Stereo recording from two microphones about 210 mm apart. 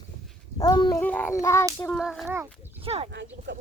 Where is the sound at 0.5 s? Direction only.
20° left (ahead or behind).